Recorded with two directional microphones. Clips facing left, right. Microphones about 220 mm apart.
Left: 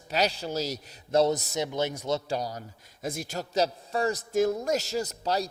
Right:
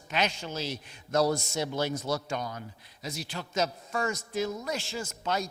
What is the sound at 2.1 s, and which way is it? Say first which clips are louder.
A man's voice: left 3 dB; 30° left (ahead or behind).